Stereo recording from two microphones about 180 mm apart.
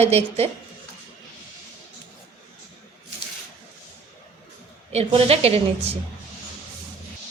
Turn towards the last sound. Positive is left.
turn(degrees=-35)  # may be behind; listen again after turning